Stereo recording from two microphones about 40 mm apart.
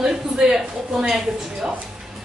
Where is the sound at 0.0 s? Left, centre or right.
Centre.